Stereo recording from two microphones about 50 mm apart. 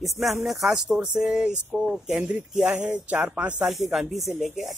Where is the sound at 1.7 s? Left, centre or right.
Centre.